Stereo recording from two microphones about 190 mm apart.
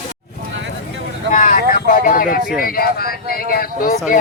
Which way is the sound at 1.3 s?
45° left (ahead or behind).